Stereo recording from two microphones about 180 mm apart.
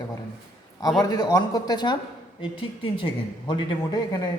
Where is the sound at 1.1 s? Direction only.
20° left (ahead or behind).